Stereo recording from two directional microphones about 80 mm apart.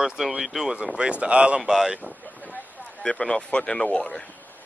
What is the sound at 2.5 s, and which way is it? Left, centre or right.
Speech, centre.